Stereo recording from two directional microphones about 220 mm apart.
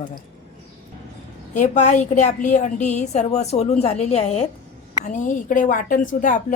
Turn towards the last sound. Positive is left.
turn(degrees=35)  # may be behind; listen again after turning